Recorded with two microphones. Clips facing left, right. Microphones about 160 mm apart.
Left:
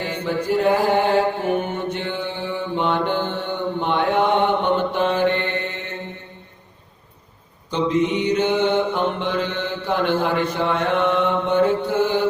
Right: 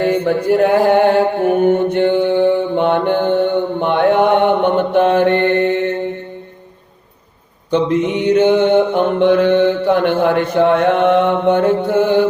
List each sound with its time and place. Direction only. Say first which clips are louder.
0.0 s mantra: right 9 dB; 55° right (ahead or behind)
7.7 s mantra: right 5 dB; 60° right (ahead or behind)